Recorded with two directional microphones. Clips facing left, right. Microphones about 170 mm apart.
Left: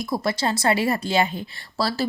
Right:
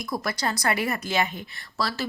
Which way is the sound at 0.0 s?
25° left (ahead or behind).